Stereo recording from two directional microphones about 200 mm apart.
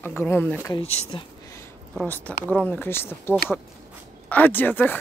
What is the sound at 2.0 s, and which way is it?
Speech, 10° left (ahead or behind).